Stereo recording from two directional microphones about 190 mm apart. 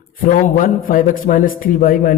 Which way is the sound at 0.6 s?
45° left (ahead or behind).